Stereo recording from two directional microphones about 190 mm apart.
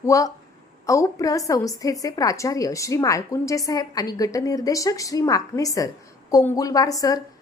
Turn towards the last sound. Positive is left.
turn(degrees=20)  # may be behind; listen again after turning